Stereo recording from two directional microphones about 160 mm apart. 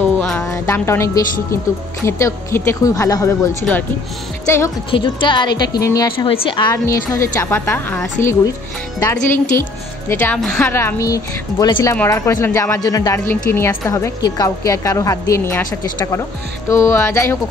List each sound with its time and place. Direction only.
0.2 s a sound: 5° left (ahead or behind)
0.5 s a woman's voice: 15° left (ahead or behind)
4.9 s a woman's voice: 30° left (ahead or behind); by 10.7 s 5° left (ahead or behind)
10.7 s a woman's voice: 15° left (ahead or behind)
16.6 s a woman's voice: 15° left (ahead or behind)